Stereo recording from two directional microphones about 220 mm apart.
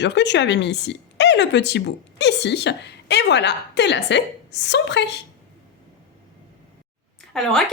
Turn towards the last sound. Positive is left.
turn(degrees=0)  # may be behind; listen again after turning